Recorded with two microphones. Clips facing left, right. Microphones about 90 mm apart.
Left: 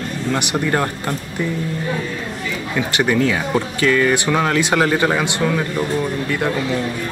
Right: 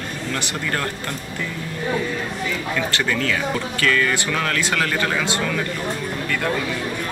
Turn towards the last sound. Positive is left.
turn(degrees=15)  # may be behind; listen again after turning